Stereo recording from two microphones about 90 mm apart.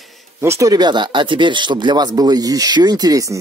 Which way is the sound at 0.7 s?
55° right (ahead or behind).